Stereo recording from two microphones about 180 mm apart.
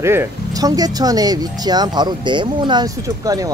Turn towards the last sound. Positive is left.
turn(degrees=-20)  # may be behind; listen again after turning